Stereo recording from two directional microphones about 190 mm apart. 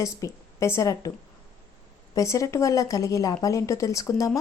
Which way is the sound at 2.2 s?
15° left (ahead or behind).